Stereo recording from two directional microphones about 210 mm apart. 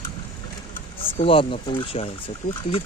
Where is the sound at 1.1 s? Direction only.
25° left (ahead or behind).